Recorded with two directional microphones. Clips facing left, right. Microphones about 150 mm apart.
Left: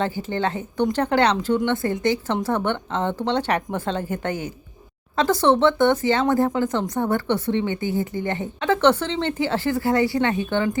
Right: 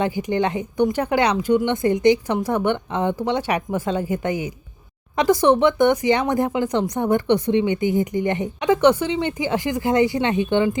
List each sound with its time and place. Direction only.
0.0 s speech: 15° right (ahead or behind)